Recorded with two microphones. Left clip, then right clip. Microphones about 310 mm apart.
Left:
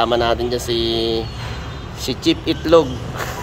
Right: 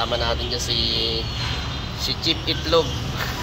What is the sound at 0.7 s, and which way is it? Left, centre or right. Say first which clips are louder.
Speech: left 2 dB; left.